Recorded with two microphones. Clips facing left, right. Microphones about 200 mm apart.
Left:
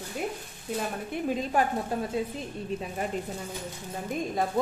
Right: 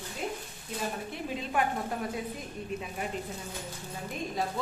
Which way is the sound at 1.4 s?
40° left (ahead or behind).